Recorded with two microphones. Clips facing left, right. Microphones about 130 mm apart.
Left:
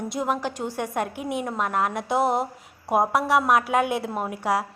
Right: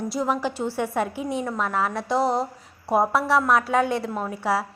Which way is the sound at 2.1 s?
20° left (ahead or behind).